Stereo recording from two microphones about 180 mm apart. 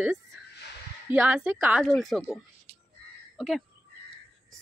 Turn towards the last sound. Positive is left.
turn(degrees=0)  # may be behind; listen again after turning